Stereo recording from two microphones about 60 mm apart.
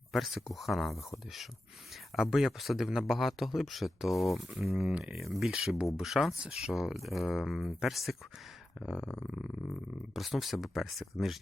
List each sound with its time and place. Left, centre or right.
0.1 s speech: centre
2.1 s speech: centre
9.0 s a sound: left
10.2 s speech: centre